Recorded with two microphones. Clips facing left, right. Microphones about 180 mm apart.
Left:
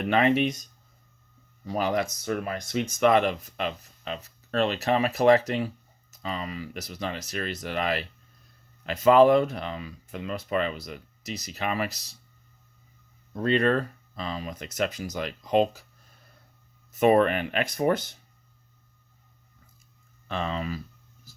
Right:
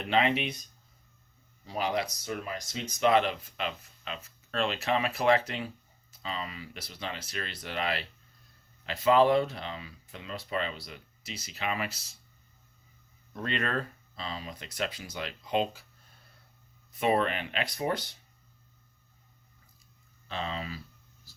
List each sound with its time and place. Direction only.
0.0 s speech: 50° left (ahead or behind)
3.0 s speech: 50° left (ahead or behind)
13.3 s speech: 35° left (ahead or behind)
16.9 s speech: 45° left (ahead or behind)
20.2 s speech: 50° left (ahead or behind)